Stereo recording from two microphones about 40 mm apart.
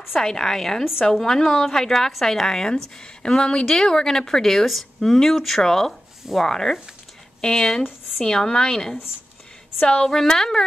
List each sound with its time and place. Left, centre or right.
0.1 s a woman's voice: centre